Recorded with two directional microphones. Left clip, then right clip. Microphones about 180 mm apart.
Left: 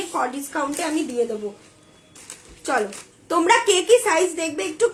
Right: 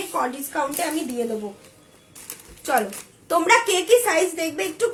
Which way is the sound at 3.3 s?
20° left (ahead or behind).